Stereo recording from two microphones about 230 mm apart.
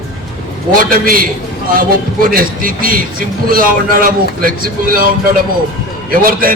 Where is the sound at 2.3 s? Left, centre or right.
Right.